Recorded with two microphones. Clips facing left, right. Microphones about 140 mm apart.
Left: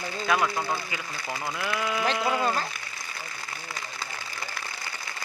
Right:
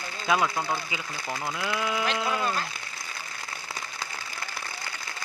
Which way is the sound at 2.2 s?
20° left (ahead or behind).